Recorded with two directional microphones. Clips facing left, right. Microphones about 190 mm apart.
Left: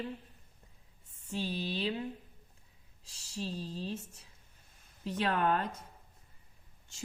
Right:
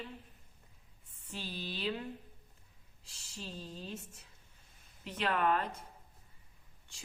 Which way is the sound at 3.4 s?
35° left (ahead or behind).